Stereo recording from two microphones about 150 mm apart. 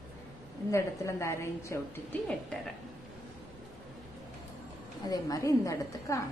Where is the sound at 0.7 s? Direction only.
20° left (ahead or behind).